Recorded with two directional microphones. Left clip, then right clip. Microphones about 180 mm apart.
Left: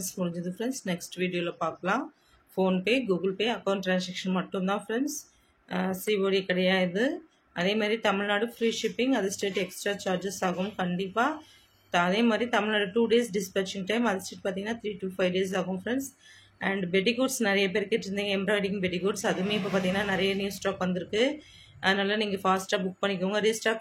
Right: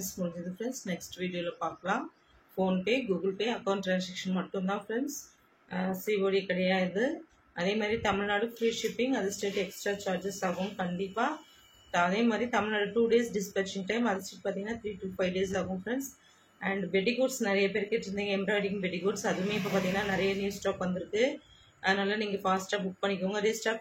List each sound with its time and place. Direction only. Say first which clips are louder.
0.1 s speech: left 3 dB; 50° left (ahead or behind)